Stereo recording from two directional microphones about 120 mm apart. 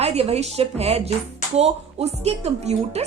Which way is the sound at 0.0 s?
60° right (ahead or behind).